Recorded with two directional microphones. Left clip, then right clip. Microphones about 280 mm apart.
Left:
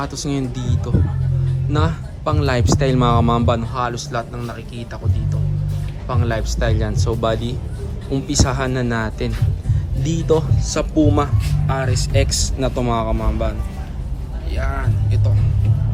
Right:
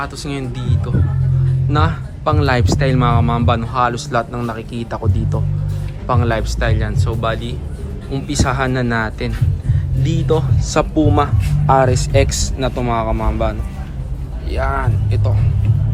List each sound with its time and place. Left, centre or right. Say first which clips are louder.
0.0 s speech: even; centre